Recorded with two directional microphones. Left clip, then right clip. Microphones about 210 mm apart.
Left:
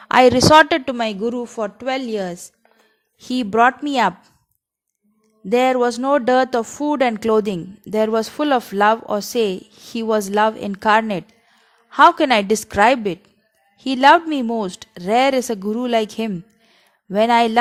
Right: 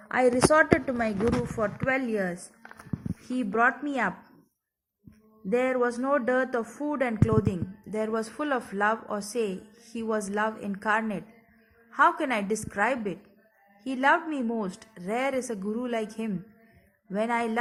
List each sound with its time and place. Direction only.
0.1 s speech: 45° left (ahead or behind)
1.6 s speech: 15° left (ahead or behind)
2.1 s a woman's voice: 35° left (ahead or behind)
3.2 s speech: 50° left (ahead or behind)
5.5 s speech: 55° left (ahead or behind)